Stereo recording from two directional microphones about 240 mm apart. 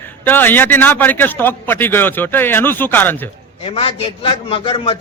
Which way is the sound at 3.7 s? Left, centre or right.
Left.